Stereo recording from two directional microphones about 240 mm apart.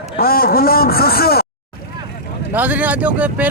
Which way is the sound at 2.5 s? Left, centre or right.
Centre.